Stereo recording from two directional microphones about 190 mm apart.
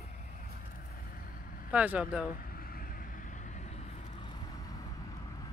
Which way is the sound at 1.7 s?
5° right (ahead or behind).